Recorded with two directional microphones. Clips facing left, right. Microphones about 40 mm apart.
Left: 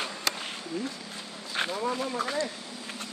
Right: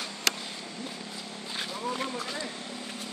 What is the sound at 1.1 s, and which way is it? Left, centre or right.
Vehicle, left.